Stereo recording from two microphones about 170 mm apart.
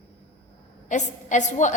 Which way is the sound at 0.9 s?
45° left (ahead or behind).